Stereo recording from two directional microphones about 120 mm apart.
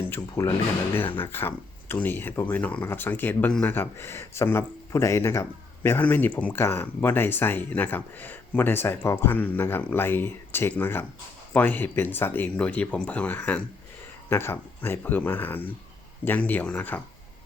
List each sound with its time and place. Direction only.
0.1 s speech: 20° left (ahead or behind)